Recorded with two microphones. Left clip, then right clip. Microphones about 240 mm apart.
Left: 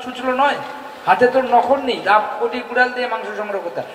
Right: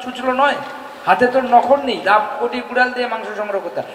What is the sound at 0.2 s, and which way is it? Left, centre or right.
A man's voice, right.